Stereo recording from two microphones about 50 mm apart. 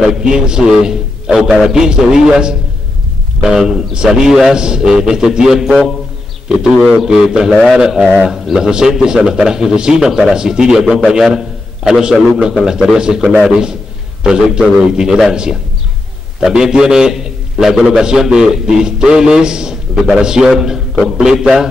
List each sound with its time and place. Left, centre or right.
0.0 s a man's voice: centre
8.1 s a man's voice: centre